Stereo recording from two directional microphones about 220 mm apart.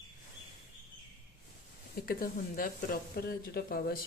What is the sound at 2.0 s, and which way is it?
Speech, 40° left (ahead or behind).